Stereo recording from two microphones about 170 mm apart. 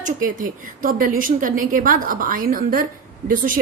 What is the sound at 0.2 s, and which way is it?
A woman's voice, 55° right (ahead or behind).